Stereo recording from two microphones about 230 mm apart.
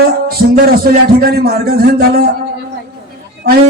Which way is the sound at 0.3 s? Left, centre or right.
Right.